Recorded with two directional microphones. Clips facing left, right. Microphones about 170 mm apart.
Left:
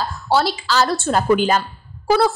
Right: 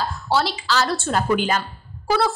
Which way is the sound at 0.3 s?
45° left (ahead or behind).